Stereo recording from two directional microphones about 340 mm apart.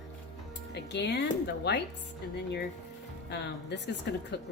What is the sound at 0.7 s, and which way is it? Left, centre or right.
Music, left.